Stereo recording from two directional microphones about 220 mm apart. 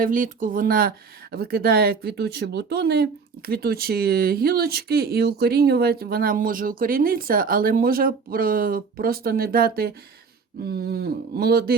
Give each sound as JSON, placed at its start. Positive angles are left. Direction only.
{"t": 0.0, "sound": "speech", "side_deg": -35}